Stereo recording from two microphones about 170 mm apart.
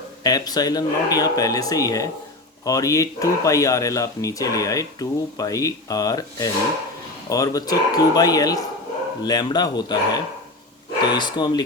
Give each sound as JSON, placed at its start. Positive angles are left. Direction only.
{"t": 0.2, "sound": "speech", "side_deg": 20}